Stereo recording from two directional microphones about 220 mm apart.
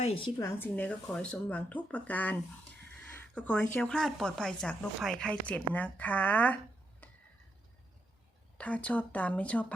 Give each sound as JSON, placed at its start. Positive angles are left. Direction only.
{"t": 0.0, "sound": "speech", "side_deg": 25}
{"t": 0.3, "sound": "speech", "side_deg": 10}
{"t": 7.0, "sound": "a sound", "side_deg": 10}
{"t": 8.5, "sound": "speech", "side_deg": 5}